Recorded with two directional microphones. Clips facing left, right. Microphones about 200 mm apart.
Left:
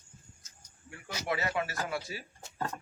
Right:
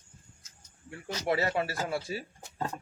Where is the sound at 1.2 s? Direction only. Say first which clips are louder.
Right 4 dB; 35° right (ahead or behind).